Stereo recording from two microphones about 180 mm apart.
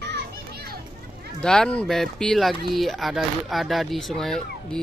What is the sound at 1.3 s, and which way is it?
Speech, 5° left (ahead or behind).